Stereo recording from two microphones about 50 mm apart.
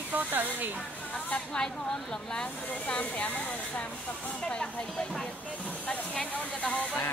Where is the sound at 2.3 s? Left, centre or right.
Left.